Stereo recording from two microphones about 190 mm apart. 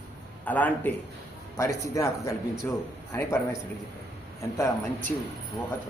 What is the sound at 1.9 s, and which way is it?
Speech, 15° left (ahead or behind).